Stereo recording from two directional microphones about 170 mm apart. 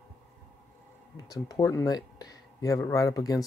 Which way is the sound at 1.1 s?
20° left (ahead or behind).